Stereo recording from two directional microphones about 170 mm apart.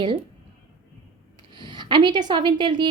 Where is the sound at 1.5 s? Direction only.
25° right (ahead or behind).